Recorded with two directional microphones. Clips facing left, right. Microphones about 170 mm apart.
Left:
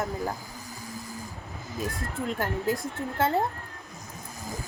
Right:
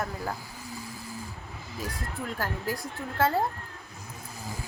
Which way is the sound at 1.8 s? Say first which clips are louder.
Left 4 dB; 20° left (ahead or behind).